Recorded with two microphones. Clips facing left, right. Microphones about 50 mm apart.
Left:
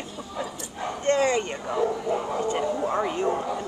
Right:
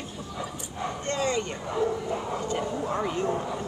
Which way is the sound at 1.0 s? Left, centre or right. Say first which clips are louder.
Left 7 dB; left.